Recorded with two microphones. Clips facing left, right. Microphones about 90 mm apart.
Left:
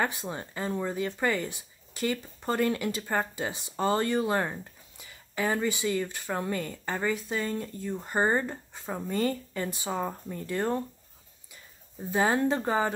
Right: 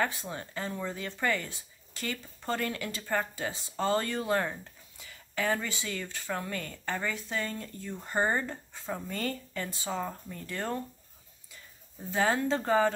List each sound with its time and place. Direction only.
0.0 s speech: 15° left (ahead or behind)
12.1 s speech: 20° left (ahead or behind)